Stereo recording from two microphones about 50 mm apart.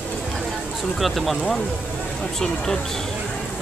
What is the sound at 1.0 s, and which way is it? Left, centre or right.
Speech, centre.